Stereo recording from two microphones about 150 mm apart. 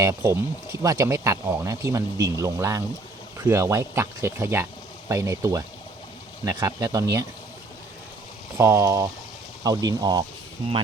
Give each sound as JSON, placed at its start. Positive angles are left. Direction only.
{"t": 0.0, "sound": "speech", "side_deg": -20}
{"t": 8.5, "sound": "speech", "side_deg": -20}